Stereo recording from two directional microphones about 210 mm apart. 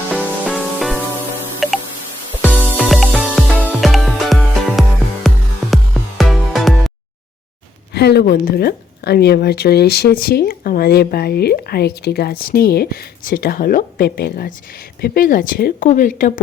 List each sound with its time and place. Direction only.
0.1 s music: 5° right (ahead or behind)
7.9 s speech: 50° left (ahead or behind)